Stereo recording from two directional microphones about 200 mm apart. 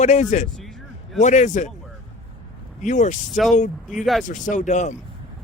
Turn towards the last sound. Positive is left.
turn(degrees=35)  # may be behind; listen again after turning